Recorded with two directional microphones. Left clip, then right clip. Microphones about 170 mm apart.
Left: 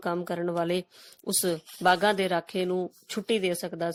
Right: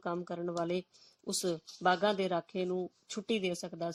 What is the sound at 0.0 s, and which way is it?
Speech, 40° left (ahead or behind).